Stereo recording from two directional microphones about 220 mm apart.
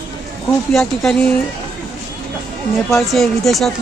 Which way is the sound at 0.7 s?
Centre (ahead or behind).